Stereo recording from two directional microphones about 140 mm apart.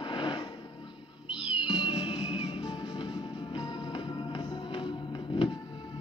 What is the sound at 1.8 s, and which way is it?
Music, 40° left (ahead or behind).